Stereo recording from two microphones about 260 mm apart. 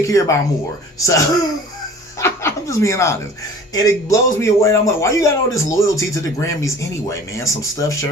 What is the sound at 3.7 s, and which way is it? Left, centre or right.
A man's voice, centre.